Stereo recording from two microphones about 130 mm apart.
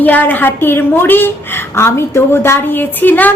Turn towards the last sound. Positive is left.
turn(degrees=15)  # may be behind; listen again after turning